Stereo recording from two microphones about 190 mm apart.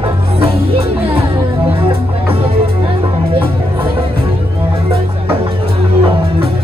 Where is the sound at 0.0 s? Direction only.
30° right (ahead or behind).